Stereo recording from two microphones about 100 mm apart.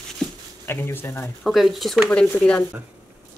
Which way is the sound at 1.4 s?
Centre (ahead or behind).